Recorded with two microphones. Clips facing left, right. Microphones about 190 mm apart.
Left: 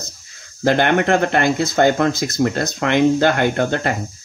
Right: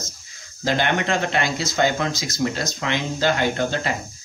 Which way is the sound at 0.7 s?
55° left (ahead or behind).